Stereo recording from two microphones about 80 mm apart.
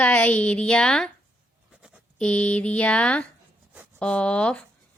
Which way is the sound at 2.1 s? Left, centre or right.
Centre.